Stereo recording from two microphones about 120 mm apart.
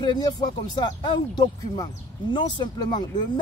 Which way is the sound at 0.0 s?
35° left (ahead or behind).